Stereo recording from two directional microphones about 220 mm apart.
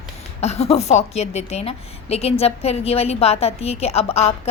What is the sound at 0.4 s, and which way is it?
A woman's voice, 30° left (ahead or behind).